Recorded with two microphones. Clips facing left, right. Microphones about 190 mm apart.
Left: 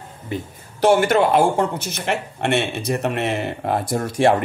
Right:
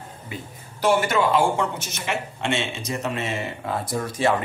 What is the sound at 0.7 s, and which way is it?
Speech, 60° left (ahead or behind).